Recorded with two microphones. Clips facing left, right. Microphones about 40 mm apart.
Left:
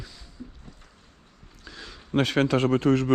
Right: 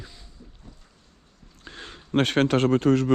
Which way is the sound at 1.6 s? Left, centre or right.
Right.